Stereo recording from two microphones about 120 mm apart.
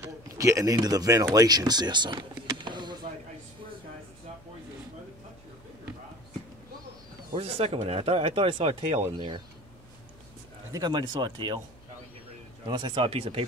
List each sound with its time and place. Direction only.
0.0 s speech: 25° right (ahead or behind)
7.3 s speech: 60° right (ahead or behind)
9.1 s speech: 40° right (ahead or behind)
10.7 s speech: 35° right (ahead or behind)
12.6 s speech: 40° right (ahead or behind)